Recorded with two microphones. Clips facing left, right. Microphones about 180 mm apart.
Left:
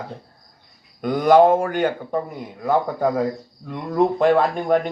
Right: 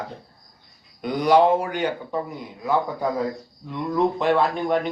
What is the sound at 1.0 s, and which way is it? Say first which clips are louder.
Speech: left 4 dB; 50° left (ahead or behind).